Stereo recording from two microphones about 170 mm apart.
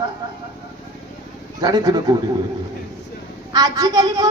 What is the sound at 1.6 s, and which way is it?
Speech, 20° right (ahead or behind).